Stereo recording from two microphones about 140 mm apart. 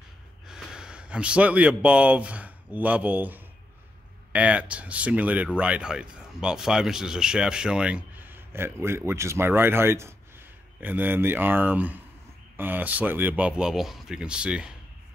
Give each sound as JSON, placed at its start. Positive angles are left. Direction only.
{"t": 0.5, "sound": "speech", "side_deg": -5}